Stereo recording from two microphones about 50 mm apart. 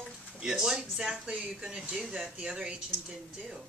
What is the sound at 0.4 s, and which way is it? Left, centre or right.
Speech, centre.